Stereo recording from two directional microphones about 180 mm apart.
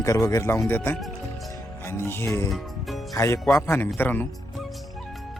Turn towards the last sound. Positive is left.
turn(degrees=10)  # may be behind; listen again after turning